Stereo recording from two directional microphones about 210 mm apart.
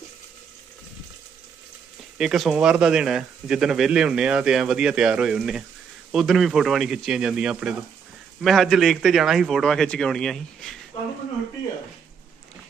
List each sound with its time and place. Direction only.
2.1 s speech: centre (ahead or behind)